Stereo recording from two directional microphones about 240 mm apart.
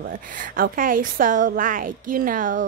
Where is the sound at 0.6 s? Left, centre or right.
Right.